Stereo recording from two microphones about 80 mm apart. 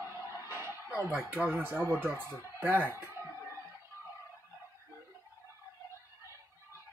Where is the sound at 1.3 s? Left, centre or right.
Right.